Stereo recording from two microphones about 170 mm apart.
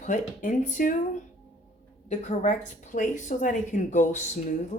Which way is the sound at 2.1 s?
45° left (ahead or behind).